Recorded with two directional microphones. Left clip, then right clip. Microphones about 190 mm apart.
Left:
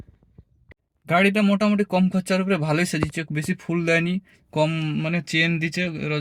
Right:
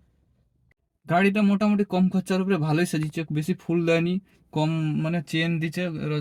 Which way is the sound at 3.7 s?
35° left (ahead or behind).